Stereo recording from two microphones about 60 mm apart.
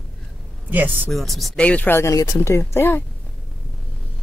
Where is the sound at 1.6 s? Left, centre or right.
Left.